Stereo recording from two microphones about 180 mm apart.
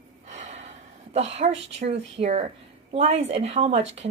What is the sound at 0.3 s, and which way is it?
Gasp, 40° right (ahead or behind).